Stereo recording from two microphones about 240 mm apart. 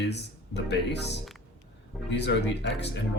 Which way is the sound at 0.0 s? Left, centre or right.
Left.